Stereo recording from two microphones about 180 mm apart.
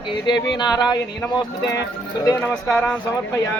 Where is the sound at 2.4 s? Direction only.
5° left (ahead or behind).